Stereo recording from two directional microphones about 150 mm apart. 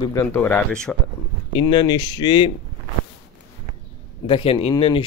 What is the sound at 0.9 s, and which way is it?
Speech, 5° left (ahead or behind).